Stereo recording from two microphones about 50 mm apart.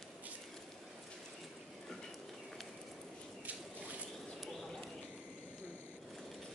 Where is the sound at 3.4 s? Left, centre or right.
Right.